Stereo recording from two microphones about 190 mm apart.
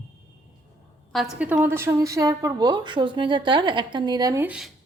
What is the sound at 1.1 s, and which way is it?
A woman's voice, 5° right (ahead or behind).